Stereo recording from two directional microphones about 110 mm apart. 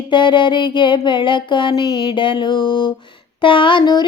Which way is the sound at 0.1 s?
45° left (ahead or behind).